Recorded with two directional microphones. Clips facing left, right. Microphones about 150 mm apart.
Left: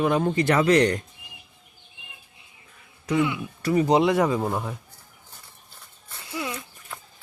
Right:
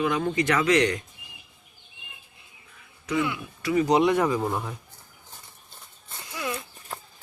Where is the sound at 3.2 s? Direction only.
20° left (ahead or behind).